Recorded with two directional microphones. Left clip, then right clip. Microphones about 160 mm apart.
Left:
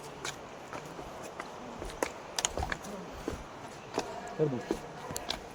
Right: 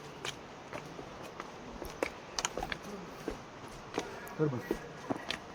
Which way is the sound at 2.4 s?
35° left (ahead or behind).